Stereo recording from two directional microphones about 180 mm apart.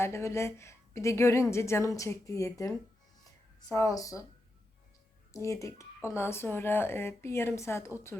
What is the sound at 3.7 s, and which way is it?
Speech, 20° left (ahead or behind).